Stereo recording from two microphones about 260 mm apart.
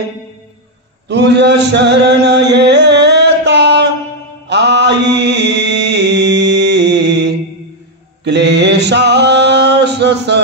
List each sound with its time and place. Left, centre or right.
1.0 s chant: right
4.5 s mantra: right